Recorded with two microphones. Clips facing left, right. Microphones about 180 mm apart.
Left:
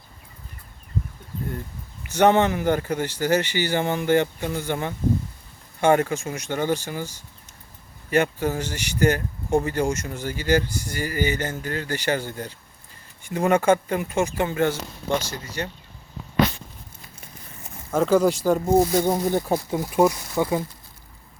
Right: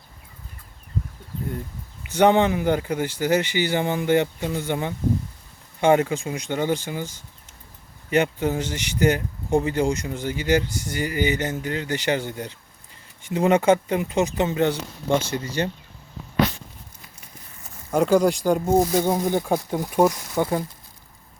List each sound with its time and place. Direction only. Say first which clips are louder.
2.0 s speech: even; 15° right (ahead or behind)
8.1 s speech: right 1 dB; 15° right (ahead or behind)
18.0 s speech: even; centre (ahead or behind)